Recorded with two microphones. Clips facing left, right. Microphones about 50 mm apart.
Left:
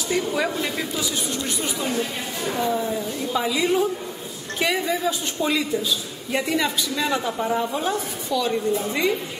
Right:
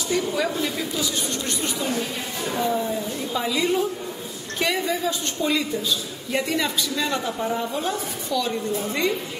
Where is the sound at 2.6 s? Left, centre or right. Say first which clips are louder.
Even; centre.